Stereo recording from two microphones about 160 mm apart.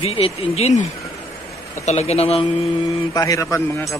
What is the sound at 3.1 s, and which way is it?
Speech, 20° left (ahead or behind).